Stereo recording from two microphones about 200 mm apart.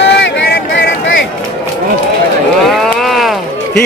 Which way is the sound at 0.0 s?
65° left (ahead or behind).